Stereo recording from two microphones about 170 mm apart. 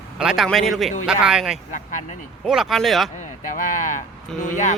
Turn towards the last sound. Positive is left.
turn(degrees=45)  # may be behind; listen again after turning